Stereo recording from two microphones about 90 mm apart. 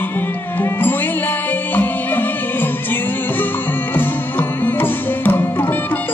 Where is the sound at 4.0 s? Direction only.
20° left (ahead or behind).